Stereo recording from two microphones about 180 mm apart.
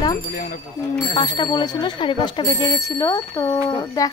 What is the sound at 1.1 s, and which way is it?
Speech, 25° left (ahead or behind).